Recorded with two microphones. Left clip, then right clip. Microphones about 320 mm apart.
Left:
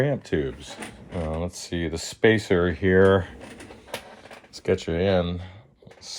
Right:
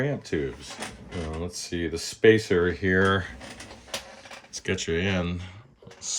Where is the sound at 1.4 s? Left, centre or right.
Centre.